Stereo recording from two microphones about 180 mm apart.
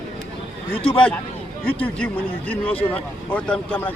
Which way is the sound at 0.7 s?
30° left (ahead or behind).